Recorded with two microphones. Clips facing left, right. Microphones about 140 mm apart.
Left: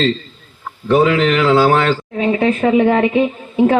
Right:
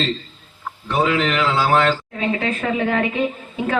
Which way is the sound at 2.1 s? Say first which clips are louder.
Left 7 dB; 35° left (ahead or behind).